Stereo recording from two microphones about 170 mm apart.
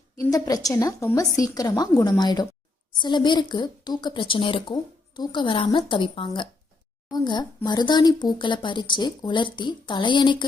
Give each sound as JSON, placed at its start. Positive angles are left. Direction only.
{"t": 0.2, "sound": "speech", "side_deg": 20}